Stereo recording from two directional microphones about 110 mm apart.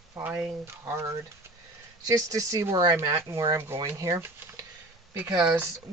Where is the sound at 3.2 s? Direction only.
30° right (ahead or behind); by 5.7 s 15° right (ahead or behind).